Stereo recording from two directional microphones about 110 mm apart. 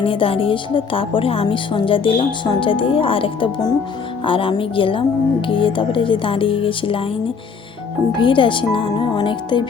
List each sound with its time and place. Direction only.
0.0 s speech: 55° left (ahead or behind)
8.1 s speech: 50° left (ahead or behind)